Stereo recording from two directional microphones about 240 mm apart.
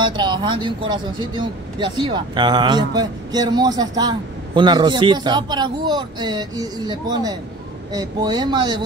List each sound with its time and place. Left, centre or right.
0.0 s speech: centre